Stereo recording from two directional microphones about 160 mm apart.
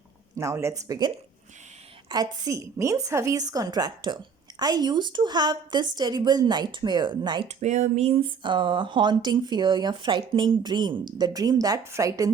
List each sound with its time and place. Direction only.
0.3 s speech: 15° right (ahead or behind)
7.4 s speech: 45° right (ahead or behind); by 12.3 s 20° right (ahead or behind)